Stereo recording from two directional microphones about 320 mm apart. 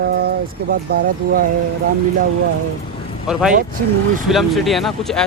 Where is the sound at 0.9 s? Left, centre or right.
Right.